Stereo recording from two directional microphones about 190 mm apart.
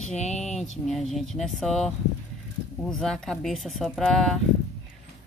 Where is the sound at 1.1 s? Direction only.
Centre (ahead or behind).